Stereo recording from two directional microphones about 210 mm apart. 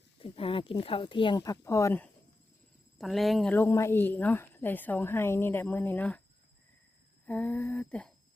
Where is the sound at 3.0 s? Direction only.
Centre (ahead or behind).